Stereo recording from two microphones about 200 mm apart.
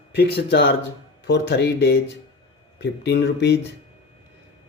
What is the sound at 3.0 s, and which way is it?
Speech, 60° left (ahead or behind).